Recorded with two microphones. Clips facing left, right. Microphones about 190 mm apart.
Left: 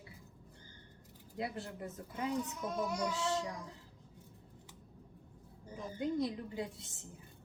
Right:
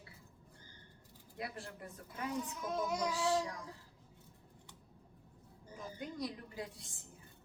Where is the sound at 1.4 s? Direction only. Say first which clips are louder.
Left 5 dB; 25° left (ahead or behind).